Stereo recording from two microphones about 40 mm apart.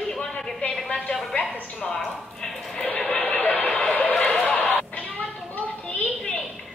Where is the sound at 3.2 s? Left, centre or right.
Left.